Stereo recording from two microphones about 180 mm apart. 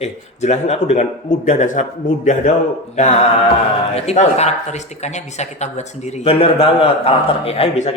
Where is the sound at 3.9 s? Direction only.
35° left (ahead or behind).